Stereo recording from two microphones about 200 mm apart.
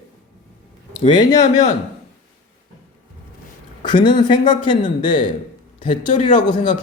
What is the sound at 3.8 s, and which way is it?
A man's voice, 25° left (ahead or behind).